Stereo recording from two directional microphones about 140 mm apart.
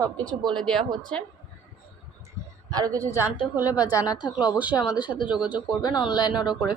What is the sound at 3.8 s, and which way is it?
Speech, 25° left (ahead or behind).